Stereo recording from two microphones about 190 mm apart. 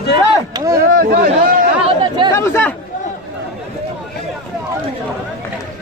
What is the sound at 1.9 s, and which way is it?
Chatter, 25° right (ahead or behind).